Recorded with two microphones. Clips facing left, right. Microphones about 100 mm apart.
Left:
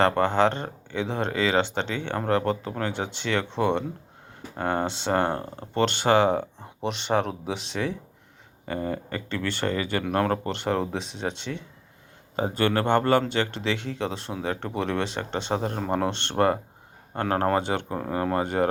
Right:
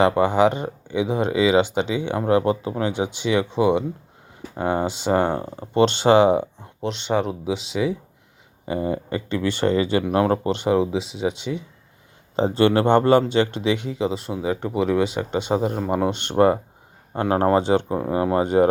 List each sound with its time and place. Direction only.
0.0 s speech: 10° right (ahead or behind)
6.6 s speech: centre (ahead or behind); by 10.8 s 15° right (ahead or behind)
10.8 s speech: 5° right (ahead or behind)
12.4 s speech: 20° right (ahead or behind)